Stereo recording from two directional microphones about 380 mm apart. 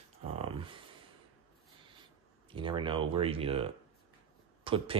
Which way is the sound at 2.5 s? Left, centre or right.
Centre.